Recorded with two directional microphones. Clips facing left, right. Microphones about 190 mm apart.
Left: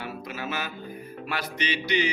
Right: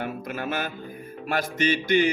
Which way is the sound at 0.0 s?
50° right (ahead or behind).